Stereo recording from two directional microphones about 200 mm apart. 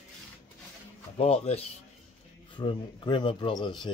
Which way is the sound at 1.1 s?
30° left (ahead or behind).